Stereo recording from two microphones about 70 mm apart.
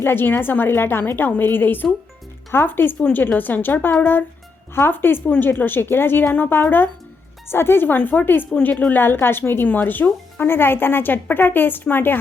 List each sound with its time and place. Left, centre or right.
0.0 s a woman's voice: left